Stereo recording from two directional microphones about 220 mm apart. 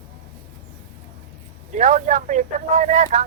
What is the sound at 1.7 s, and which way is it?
Speech, 35° right (ahead or behind).